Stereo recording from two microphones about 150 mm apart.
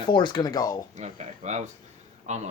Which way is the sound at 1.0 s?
50° right (ahead or behind).